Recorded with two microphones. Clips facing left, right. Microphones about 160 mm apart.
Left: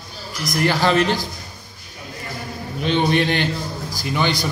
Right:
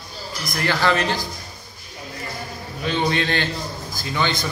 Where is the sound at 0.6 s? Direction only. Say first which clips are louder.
Left 3 dB; 15° left (ahead or behind).